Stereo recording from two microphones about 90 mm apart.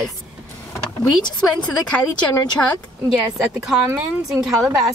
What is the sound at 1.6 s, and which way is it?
Speech, 10° left (ahead or behind).